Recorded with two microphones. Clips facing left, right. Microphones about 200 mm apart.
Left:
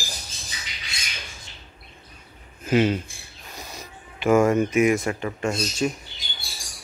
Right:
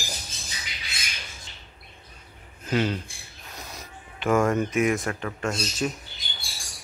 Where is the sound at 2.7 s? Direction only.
10° left (ahead or behind).